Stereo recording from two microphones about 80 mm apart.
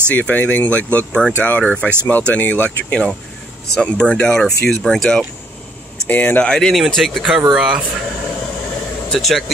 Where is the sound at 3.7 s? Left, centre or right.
Centre.